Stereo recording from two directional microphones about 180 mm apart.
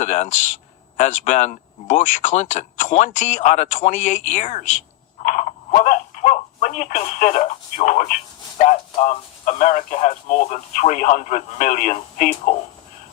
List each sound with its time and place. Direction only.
0.0 s speech: 40° left (ahead or behind)
5.2 s telephone: 40° left (ahead or behind)
8.6 s speech: 40° left (ahead or behind)